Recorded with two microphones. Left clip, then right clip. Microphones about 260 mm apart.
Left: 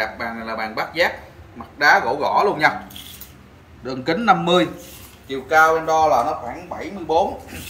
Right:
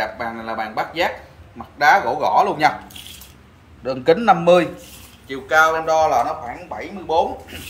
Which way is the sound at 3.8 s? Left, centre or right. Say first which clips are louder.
Right 3 dB; right.